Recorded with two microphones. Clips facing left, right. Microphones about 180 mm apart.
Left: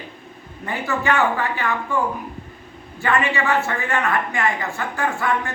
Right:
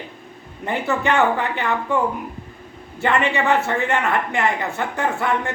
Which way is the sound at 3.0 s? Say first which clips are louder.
Right 2 dB; 20° right (ahead or behind).